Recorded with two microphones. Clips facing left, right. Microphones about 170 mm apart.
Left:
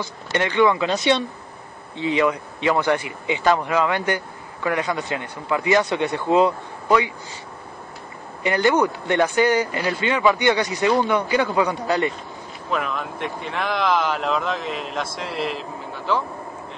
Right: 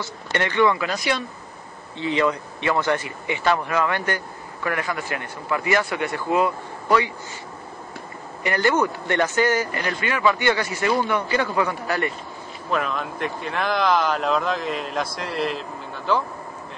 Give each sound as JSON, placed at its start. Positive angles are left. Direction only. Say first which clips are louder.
{"t": 0.0, "sound": "a man's voice", "louder": "left 2 dB", "side_deg": 15}
{"t": 8.4, "sound": "speech", "louder": "left 2 dB", "side_deg": 20}
{"t": 12.7, "sound": "speech", "louder": "right 1 dB", "side_deg": 0}